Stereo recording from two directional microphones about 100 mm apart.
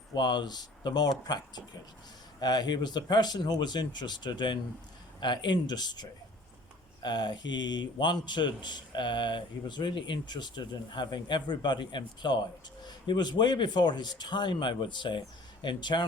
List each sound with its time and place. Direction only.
0.1 s a man's voice: 45° left (ahead or behind)